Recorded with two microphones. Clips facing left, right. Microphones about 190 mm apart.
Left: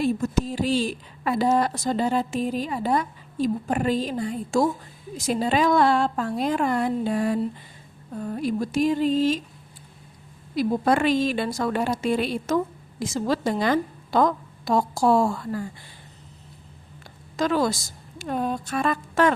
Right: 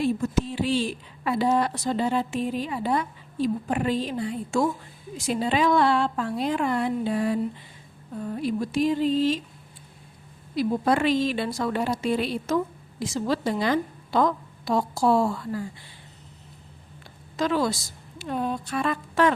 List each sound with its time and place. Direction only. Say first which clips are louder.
0.0 s a woman's voice: left 1 dB; 40° left (ahead or behind)
8.4 s a woman's voice: left 1 dB; 45° left (ahead or behind)
10.5 s a woman's voice: left 1 dB; 50° left (ahead or behind)
17.3 s a woman's voice: left 2 dB; 45° left (ahead or behind)